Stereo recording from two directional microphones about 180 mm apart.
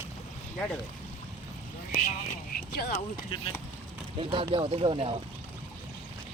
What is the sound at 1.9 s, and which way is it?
Speech, 40° left (ahead or behind).